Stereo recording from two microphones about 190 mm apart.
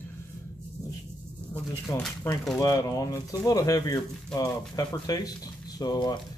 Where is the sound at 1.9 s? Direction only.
20° left (ahead or behind).